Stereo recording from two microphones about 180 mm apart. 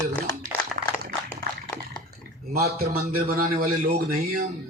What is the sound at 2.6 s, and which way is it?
A man's voice, 60° right (ahead or behind).